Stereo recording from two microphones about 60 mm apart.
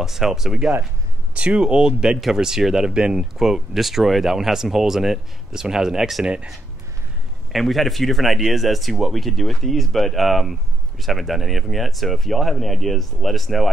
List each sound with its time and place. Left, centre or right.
0.0 s speech: centre
1.3 s speech: centre
6.2 s speech: centre
7.5 s speech: centre